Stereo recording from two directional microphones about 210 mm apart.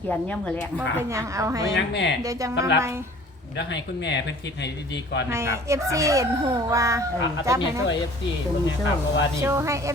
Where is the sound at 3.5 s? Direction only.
55° left (ahead or behind).